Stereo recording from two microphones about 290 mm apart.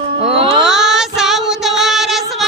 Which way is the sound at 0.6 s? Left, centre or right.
Centre.